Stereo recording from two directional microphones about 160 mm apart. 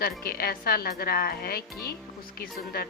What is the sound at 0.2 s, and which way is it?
A woman's voice, 75° left (ahead or behind).